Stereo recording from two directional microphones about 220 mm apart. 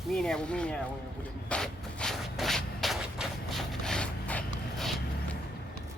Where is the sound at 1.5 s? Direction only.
5° left (ahead or behind).